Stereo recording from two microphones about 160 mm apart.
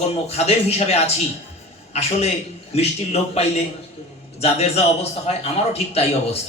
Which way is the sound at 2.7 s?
40° left (ahead or behind).